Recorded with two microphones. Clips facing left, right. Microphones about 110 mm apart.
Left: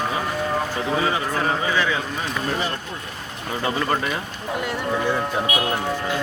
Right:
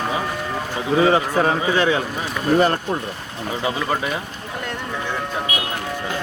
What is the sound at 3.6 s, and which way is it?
Speech, 10° right (ahead or behind).